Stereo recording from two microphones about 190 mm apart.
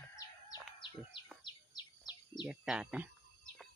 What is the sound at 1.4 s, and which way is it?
Bird vocalization, 25° left (ahead or behind).